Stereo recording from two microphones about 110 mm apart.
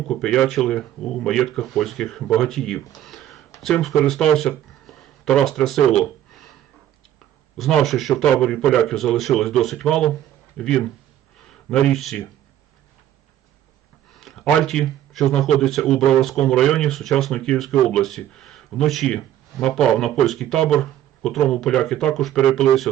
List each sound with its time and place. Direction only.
0.1 s speech: 5° left (ahead or behind)
7.6 s speech: 5° left (ahead or behind)
14.1 s a sound: centre (ahead or behind)
14.5 s speech: centre (ahead or behind)